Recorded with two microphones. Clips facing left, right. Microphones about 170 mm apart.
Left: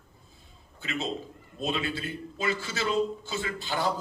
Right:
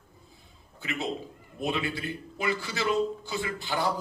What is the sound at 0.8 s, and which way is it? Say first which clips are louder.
A man's voice: even; 20° right (ahead or behind).